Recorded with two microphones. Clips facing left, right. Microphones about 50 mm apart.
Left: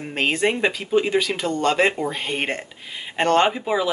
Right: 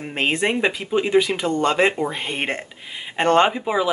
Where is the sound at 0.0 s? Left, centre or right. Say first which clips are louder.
Even; centre.